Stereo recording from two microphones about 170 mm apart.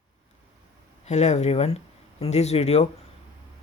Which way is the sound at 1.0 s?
40° left (ahead or behind).